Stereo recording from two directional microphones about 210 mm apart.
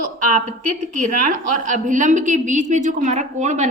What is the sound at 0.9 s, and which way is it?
A woman's voice, 40° right (ahead or behind).